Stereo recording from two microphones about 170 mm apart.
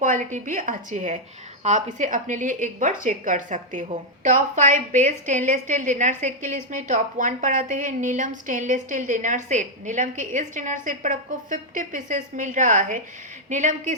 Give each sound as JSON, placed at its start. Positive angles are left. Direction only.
{"t": 0.0, "sound": "a woman's voice", "side_deg": -50}